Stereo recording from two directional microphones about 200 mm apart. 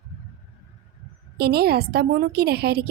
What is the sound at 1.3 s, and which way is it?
A woman's voice, 50° right (ahead or behind).